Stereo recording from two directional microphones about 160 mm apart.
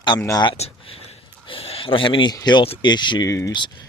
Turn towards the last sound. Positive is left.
turn(degrees=20)  # may be behind; listen again after turning